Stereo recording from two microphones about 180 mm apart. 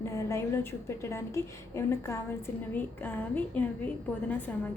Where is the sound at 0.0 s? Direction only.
15° left (ahead or behind).